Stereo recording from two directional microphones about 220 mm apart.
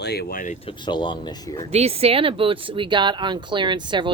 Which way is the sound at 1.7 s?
25° right (ahead or behind).